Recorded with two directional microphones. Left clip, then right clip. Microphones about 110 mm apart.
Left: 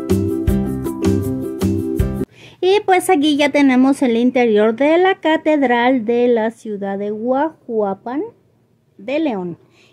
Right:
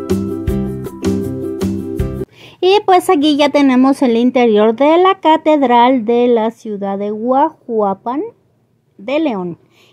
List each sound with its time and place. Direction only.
0.0 s music: centre (ahead or behind)
2.4 s a woman's voice: 30° right (ahead or behind)